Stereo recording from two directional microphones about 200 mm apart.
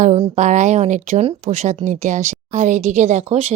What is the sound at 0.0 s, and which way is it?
Speech, 35° right (ahead or behind).